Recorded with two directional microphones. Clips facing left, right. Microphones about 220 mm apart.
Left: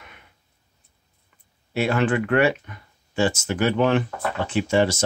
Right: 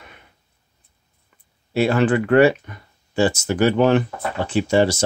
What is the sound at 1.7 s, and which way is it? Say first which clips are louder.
Speech: right 4 dB; 35° right (ahead or behind).